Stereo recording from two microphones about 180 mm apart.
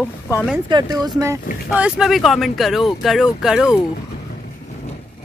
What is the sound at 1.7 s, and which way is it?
Speech, 5° right (ahead or behind).